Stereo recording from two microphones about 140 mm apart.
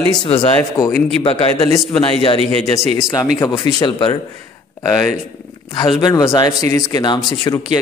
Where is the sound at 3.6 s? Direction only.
30° left (ahead or behind).